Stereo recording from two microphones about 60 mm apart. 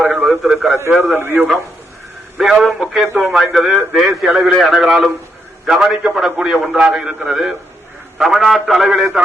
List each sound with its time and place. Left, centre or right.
0.2 s radio: centre
0.9 s a man's voice: centre
1.1 s a man's voice: right
2.4 s a man's voice: centre
3.2 s a man's voice: centre